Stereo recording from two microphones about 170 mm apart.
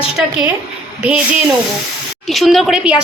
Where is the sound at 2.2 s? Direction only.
Centre (ahead or behind).